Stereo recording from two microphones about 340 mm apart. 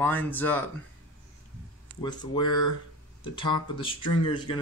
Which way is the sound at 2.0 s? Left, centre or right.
Centre.